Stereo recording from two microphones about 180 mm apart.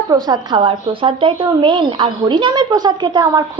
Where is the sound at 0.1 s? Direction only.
25° right (ahead or behind).